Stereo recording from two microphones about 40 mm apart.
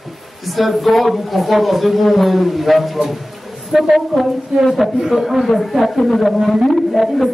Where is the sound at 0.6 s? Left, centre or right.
Centre.